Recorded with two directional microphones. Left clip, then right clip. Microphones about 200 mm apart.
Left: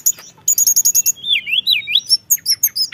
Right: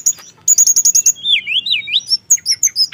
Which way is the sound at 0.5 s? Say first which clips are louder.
Right 4 dB; 10° left (ahead or behind).